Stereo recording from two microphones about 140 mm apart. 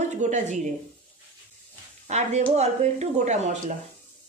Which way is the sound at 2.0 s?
55° right (ahead or behind).